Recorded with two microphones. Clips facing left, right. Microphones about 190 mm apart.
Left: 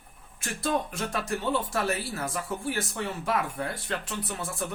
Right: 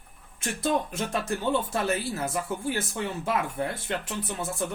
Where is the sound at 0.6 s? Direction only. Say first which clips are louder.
Right 1 dB; 25° right (ahead or behind).